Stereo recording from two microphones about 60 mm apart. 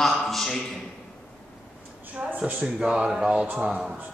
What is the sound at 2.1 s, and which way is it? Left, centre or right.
Speech, right.